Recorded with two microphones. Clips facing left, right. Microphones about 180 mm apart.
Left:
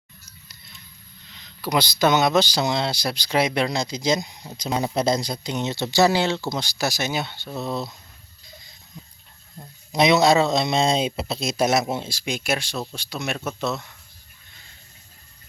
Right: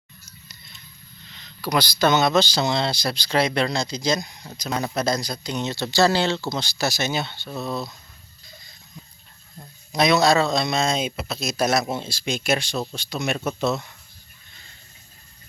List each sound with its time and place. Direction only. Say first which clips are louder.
0.3 s a sound: right 2 dB; 10° left (ahead or behind)
1.4 s speech: even; 20° left (ahead or behind)
9.9 s speech: left 1 dB; 20° left (ahead or behind); by 13.8 s centre (ahead or behind)